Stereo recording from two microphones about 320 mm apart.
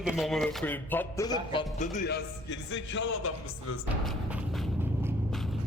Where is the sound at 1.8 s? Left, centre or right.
Left.